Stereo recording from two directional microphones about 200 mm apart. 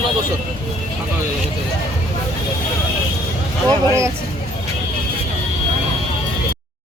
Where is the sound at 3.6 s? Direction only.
15° right (ahead or behind).